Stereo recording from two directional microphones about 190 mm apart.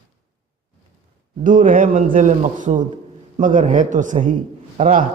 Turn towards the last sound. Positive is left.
turn(degrees=-45)  # may be behind; listen again after turning